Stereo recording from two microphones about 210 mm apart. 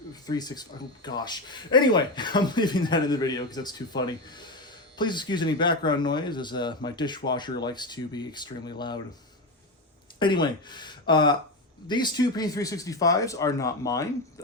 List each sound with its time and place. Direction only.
0.1 s speech: 20° left (ahead or behind)
10.2 s speech: 20° left (ahead or behind)